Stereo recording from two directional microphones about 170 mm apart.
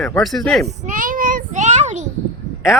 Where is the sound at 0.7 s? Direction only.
50° right (ahead or behind).